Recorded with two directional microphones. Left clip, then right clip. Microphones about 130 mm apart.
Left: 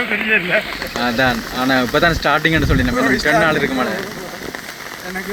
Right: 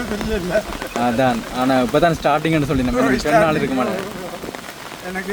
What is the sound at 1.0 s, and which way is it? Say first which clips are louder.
Speech: left 1 dB; 15° right (ahead or behind).